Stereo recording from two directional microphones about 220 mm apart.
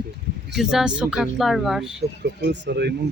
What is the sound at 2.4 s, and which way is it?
Speech, 50° right (ahead or behind).